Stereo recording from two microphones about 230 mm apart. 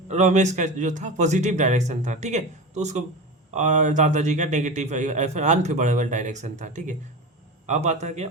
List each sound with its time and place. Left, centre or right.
0.1 s a man's voice: right